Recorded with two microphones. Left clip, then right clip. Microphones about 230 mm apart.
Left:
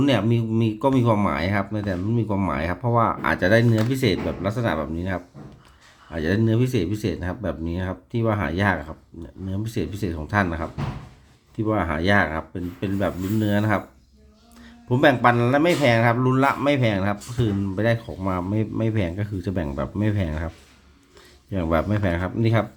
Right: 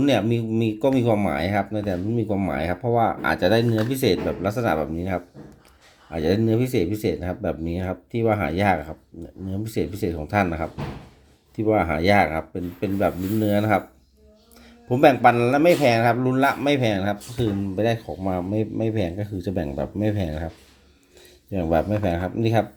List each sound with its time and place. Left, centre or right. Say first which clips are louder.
0.0 s speech: right 1 dB; centre
3.6 s speech: even; left
3.8 s speech: right 2 dB; centre
21.5 s speech: right 1 dB; centre